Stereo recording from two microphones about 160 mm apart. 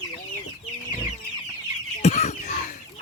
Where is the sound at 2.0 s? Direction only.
45° left (ahead or behind).